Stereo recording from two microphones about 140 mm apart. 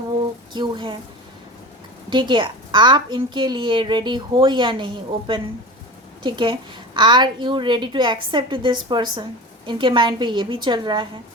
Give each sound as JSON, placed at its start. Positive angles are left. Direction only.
{"t": 0.5, "sound": "a woman's voice", "side_deg": -35}
{"t": 2.0, "sound": "a woman's voice", "side_deg": -35}